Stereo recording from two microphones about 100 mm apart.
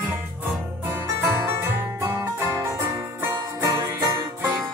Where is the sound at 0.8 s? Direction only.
20° right (ahead or behind).